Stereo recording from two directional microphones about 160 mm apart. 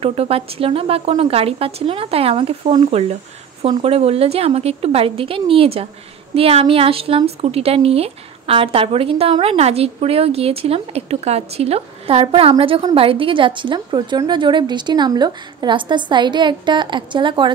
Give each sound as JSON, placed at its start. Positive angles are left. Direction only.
{"t": 0.0, "sound": "a woman's voice", "side_deg": -40}